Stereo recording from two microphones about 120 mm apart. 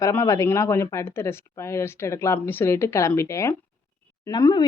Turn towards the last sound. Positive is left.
turn(degrees=35)  # may be behind; listen again after turning